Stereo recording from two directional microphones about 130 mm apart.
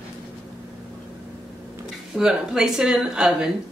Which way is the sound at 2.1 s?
5° right (ahead or behind).